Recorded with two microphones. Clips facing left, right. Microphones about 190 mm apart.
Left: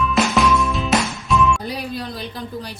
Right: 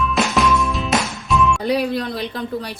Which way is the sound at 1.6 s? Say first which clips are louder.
Right 8 dB; 65° right (ahead or behind).